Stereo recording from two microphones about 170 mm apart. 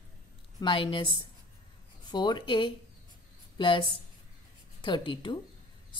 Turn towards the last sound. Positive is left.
turn(degrees=30)  # may be behind; listen again after turning